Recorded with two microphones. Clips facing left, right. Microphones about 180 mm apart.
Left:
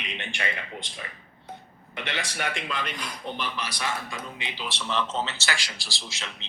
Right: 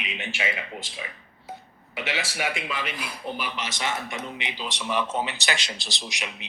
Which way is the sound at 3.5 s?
20° right (ahead or behind).